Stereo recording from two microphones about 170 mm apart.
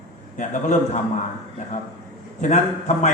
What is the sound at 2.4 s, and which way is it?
Speech, 45° left (ahead or behind).